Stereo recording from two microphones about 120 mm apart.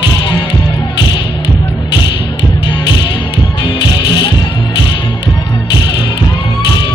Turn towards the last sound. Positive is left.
turn(degrees=40)  # may be behind; listen again after turning